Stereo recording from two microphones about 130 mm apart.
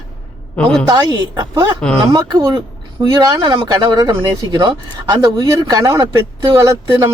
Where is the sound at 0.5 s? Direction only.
10° left (ahead or behind).